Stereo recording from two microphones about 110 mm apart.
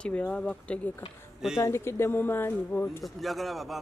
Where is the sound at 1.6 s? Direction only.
25° left (ahead or behind).